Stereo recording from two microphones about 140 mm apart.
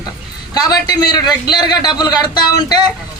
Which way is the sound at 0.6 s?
25° left (ahead or behind).